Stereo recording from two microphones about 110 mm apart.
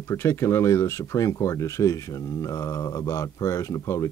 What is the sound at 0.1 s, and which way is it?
Speech, 25° left (ahead or behind).